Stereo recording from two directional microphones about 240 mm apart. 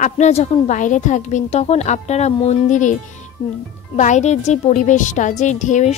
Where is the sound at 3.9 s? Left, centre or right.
Left.